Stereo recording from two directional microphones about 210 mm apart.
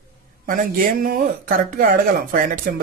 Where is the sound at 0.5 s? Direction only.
45° right (ahead or behind).